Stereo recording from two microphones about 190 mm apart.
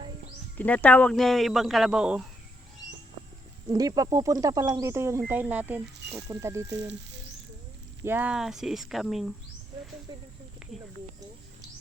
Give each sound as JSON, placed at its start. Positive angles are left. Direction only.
{"t": 0.5, "sound": "speech", "side_deg": 10}
{"t": 3.7, "sound": "speech", "side_deg": -20}
{"t": 8.0, "sound": "speech", "side_deg": -10}
{"t": 10.1, "sound": "speech", "side_deg": -20}
{"t": 10.6, "sound": "snake", "side_deg": -5}